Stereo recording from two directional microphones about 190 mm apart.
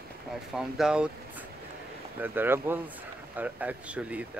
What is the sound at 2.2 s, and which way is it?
Speech, 10° right (ahead or behind).